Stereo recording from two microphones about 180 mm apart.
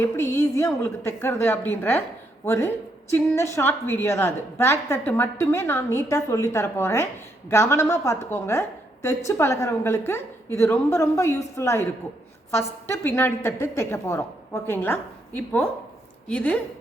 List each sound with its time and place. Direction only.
0.0 s a woman's voice: 15° left (ahead or behind)